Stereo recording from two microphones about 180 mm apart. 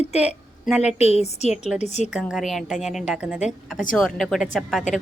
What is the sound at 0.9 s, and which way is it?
A woman's voice, 35° left (ahead or behind).